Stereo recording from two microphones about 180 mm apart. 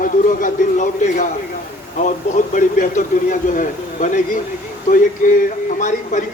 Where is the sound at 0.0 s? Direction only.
45° left (ahead or behind).